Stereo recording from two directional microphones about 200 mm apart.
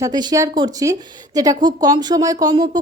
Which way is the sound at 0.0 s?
20° right (ahead or behind).